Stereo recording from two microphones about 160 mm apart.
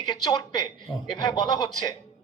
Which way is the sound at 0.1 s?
25° left (ahead or behind).